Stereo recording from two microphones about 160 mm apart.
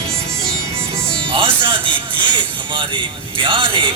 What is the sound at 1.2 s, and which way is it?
Music, 30° right (ahead or behind).